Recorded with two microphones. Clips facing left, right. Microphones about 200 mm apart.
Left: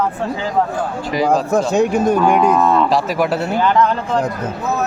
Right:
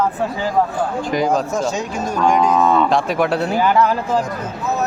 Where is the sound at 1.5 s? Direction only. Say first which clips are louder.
Left 6 dB; 60° left (ahead or behind).